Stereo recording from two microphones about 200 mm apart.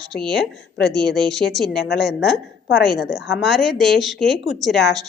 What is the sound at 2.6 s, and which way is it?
Speech, 50° left (ahead or behind).